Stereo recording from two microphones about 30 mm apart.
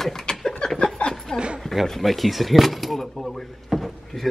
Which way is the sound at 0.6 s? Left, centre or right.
Left.